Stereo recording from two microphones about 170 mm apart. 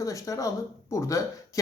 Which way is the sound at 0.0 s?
20° left (ahead or behind).